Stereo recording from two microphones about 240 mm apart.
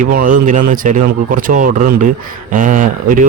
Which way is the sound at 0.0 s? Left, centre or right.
Right.